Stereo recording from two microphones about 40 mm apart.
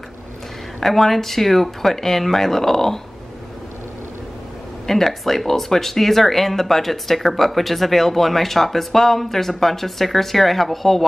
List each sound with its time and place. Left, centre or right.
0.7 s speech: centre
4.8 s speech: centre